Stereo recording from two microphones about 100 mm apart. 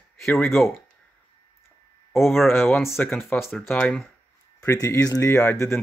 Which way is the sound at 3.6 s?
10° left (ahead or behind).